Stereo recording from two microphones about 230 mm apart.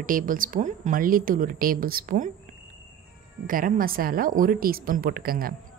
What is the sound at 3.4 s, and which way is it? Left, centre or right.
A woman's voice, right.